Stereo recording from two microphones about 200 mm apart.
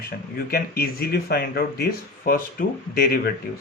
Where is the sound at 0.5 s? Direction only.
50° left (ahead or behind).